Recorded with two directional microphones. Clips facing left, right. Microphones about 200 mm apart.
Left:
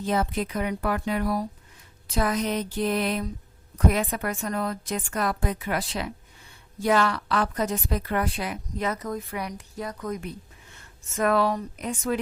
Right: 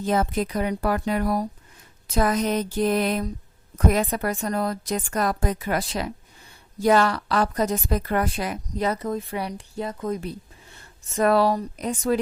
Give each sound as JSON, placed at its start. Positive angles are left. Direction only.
{"t": 0.0, "sound": "a woman's voice", "side_deg": -45}
{"t": 2.1, "sound": "a sound", "side_deg": -45}
{"t": 3.8, "sound": "a woman's voice", "side_deg": -40}